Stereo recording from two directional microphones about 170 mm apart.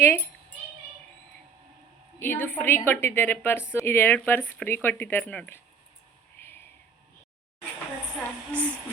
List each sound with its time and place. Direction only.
0.0 s a woman's voice: 15° left (ahead or behind)
2.1 s a woman's voice: 10° left (ahead or behind)
6.4 s a sound: 15° left (ahead or behind)